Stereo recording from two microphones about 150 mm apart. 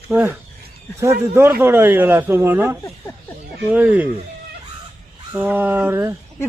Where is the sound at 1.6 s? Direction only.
15° right (ahead or behind).